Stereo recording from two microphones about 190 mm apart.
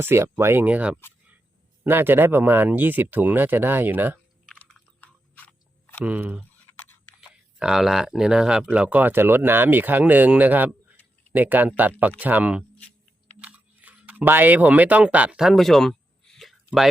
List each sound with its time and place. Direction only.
0.0 s speech: 15° right (ahead or behind)
4.4 s chewing: 5° left (ahead or behind)
6.1 s speech: 10° right (ahead or behind)
6.7 s a sound: 15° left (ahead or behind)
7.2 s speech: 5° right (ahead or behind)
13.4 s a sound: 10° right (ahead or behind)